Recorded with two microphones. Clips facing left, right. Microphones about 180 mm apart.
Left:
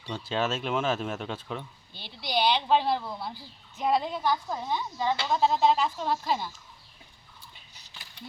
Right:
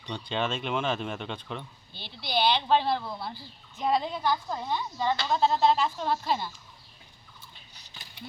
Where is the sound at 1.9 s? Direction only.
45° left (ahead or behind).